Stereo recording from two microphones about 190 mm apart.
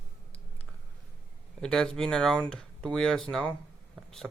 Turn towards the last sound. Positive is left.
turn(degrees=5)  # may be behind; listen again after turning